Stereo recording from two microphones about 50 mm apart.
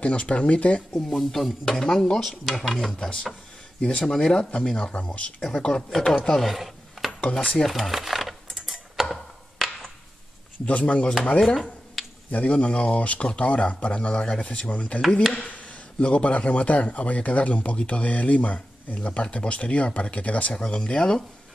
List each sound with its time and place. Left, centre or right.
0.0 s a man's voice: left
0.9 s speech: centre
3.8 s a man's voice: centre
5.9 s speech: centre
6.3 s a sound: centre
10.6 s a man's voice: left
11.4 s finger snapping: centre
12.3 s a man's voice: left; by 14.5 s centre
14.5 s a man's voice: left
20.6 s speech: centre